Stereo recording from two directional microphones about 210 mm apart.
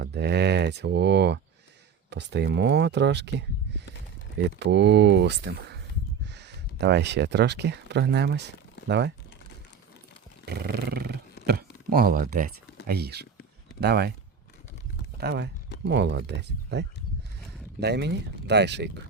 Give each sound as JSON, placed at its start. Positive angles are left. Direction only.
{"t": 0.0, "sound": "speech", "side_deg": -55}
{"t": 10.4, "sound": "a sound", "side_deg": -45}
{"t": 12.9, "sound": "speech", "side_deg": -50}
{"t": 15.2, "sound": "speech", "side_deg": -50}